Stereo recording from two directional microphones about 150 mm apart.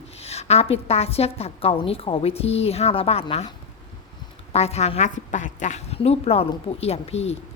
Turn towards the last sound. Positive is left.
turn(degrees=45)  # may be behind; listen again after turning